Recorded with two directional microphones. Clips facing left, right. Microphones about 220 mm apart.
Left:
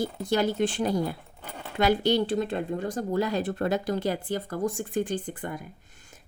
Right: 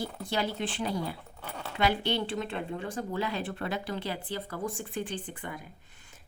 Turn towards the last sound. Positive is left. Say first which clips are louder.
# left 4 dB
turn(degrees=45)  # may be behind; listen again after turning